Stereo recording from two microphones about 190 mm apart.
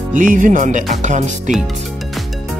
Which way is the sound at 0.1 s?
45° right (ahead or behind).